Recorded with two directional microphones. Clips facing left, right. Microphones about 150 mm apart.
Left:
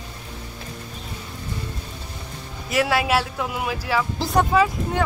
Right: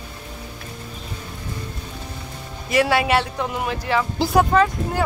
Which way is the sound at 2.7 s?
Centre (ahead or behind).